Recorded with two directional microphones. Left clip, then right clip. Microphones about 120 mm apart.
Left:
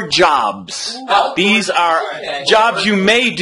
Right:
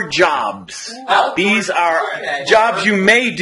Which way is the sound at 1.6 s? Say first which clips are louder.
Left 1 dB; 30° left (ahead or behind).